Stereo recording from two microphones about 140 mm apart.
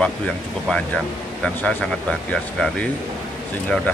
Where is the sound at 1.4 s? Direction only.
5° left (ahead or behind).